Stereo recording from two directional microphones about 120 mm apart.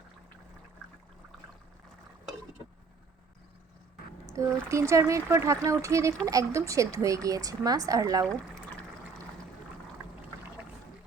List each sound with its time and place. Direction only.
4.3 s a woman's voice: 25° right (ahead or behind)